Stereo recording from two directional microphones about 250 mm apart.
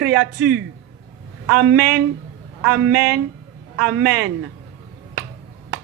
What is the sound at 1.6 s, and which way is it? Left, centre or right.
Speech, right.